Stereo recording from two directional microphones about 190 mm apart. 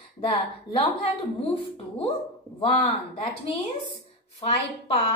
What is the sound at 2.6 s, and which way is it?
Speech, 25° left (ahead or behind).